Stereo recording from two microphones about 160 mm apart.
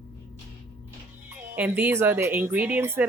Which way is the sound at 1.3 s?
10° right (ahead or behind).